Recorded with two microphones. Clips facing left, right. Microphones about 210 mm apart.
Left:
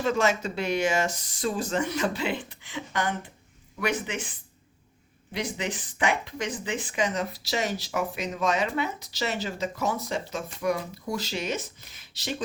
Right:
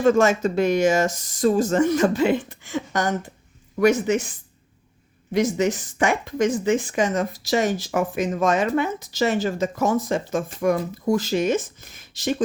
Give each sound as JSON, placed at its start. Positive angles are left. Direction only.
{"t": 0.0, "sound": "speech", "side_deg": -45}